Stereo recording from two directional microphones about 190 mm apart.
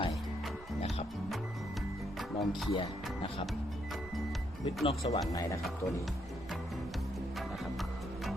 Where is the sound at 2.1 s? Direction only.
Centre (ahead or behind).